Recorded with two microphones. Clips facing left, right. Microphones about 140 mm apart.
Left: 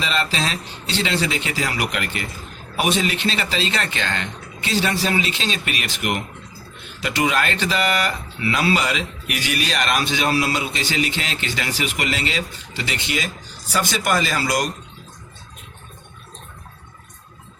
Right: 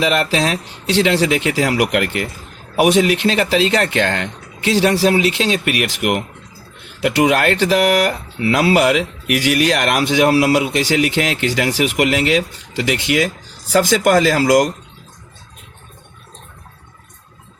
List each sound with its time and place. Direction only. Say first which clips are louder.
0.0 s speech: right 7 dB; 75° right (ahead or behind); by 14.7 s 90° right